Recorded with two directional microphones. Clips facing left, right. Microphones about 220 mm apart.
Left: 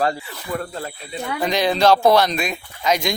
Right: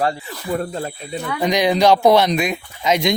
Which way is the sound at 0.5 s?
30° right (ahead or behind).